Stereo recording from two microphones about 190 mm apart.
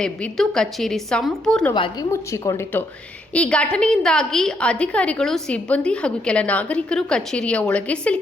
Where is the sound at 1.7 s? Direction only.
20° left (ahead or behind).